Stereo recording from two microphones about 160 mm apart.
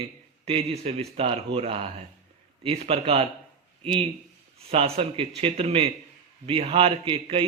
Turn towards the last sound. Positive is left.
turn(degrees=-35)  # may be behind; listen again after turning